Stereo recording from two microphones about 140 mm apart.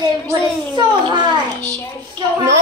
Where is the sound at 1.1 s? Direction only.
35° right (ahead or behind).